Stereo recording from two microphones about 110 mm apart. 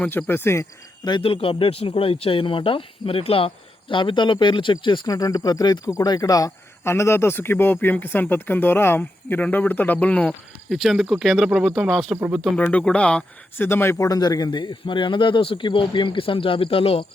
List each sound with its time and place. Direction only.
0.0 s speech: 15° left (ahead or behind)
1.2 s speech: 55° left (ahead or behind)
5.0 s speech: 35° left (ahead or behind); by 10.3 s 15° left (ahead or behind)
10.7 s speech: centre (ahead or behind)
12.5 s speech: 10° left (ahead or behind)
13.6 s speech: 20° left (ahead or behind); by 17.1 s 60° left (ahead or behind)